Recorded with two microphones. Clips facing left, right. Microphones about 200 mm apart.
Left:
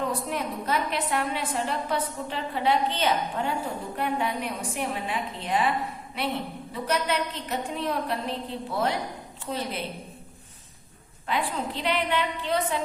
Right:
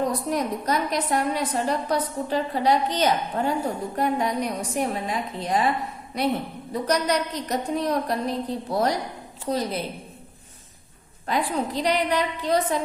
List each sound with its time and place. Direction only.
0.3 s a woman's voice: 40° right (ahead or behind)
11.3 s a woman's voice: 40° right (ahead or behind)